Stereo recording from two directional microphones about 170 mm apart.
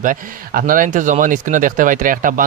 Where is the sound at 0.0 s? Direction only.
55° right (ahead or behind).